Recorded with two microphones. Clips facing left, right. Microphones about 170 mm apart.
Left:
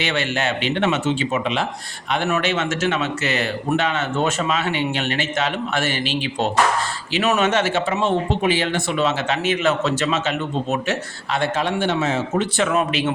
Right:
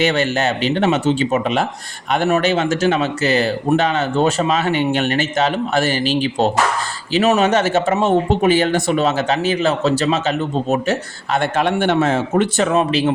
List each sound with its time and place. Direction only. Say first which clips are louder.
0.0 s speech: right 6 dB; 40° right (ahead or behind)
12.6 s speech: right 4 dB; 35° right (ahead or behind)